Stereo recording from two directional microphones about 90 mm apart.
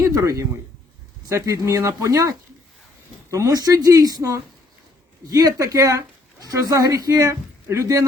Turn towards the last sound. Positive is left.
turn(degrees=-35)  # may be behind; listen again after turning